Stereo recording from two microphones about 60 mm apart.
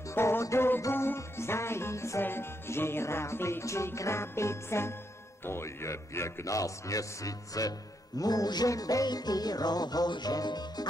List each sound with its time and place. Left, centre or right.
0.1 s music: left
6.4 s speech: left
8.2 s music: left